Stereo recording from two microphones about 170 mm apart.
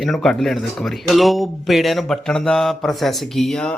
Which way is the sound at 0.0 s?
Centre (ahead or behind).